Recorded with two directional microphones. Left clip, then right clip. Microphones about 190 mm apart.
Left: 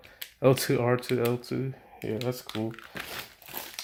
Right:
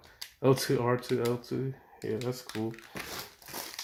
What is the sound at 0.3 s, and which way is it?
Speech, 50° left (ahead or behind).